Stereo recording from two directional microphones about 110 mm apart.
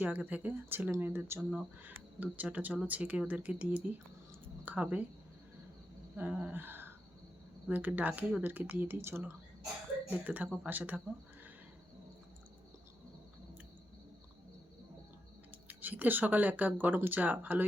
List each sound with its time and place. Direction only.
0.0 s speech: 15° right (ahead or behind)
6.1 s a sound: 15° right (ahead or behind)
7.7 s speech: 15° right (ahead or behind)
15.6 s speech: 15° right (ahead or behind)